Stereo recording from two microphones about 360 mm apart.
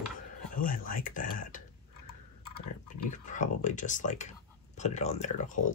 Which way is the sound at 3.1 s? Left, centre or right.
Left.